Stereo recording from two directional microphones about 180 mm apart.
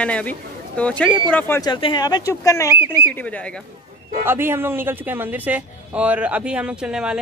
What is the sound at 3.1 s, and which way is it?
Speech, 10° left (ahead or behind).